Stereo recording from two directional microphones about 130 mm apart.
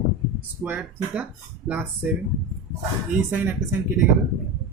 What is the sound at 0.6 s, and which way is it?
Speech, 10° right (ahead or behind).